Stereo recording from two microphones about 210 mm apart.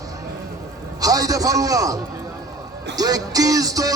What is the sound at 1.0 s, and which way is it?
A man's voice, 15° right (ahead or behind).